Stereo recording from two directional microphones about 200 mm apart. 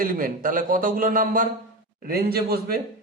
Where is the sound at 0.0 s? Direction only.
45° right (ahead or behind).